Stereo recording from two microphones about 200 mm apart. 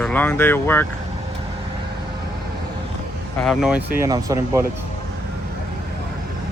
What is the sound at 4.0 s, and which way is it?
Speech, 15° right (ahead or behind).